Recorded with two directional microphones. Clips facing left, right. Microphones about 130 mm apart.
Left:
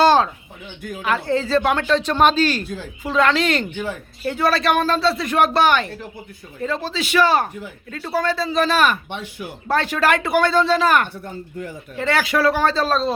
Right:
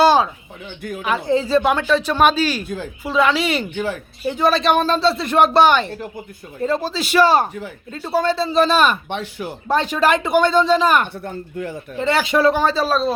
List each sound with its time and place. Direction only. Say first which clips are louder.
0.0 s bird: right 1 dB; 10° right (ahead or behind)
1.0 s speech: right 2 dB; 15° right (ahead or behind)
2.6 s speech: right 3 dB; 50° right (ahead or behind)
3.0 s speech: even; 10° right (ahead or behind); by 6.0 s 25° right (ahead or behind)
6.6 s a man's voice: right 3 dB; 40° right (ahead or behind)
9.0 s speech: right 4 dB; 90° right
9.6 s speech: right 1 dB; 20° right (ahead or behind)
11.1 s speech: right 3 dB; 60° right (ahead or behind)
11.9 s speech: right 2 dB; 20° right (ahead or behind); by 13.1 s 5° right (ahead or behind)